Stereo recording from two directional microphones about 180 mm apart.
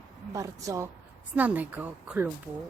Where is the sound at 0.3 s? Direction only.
20° right (ahead or behind).